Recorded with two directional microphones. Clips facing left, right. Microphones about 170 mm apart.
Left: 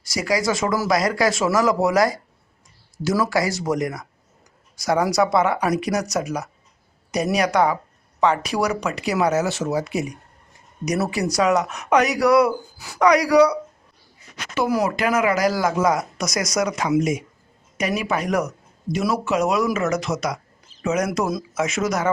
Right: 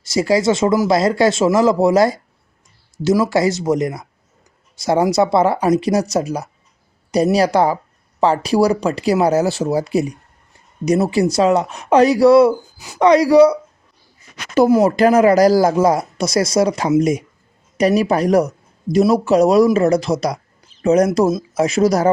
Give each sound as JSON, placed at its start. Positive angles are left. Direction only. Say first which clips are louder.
{"t": 0.0, "sound": "speech", "louder": "right 7 dB", "side_deg": -25}
{"t": 14.7, "sound": "speech", "louder": "right 7 dB", "side_deg": -30}
{"t": 21.1, "sound": "speech", "louder": "right 8 dB", "side_deg": -25}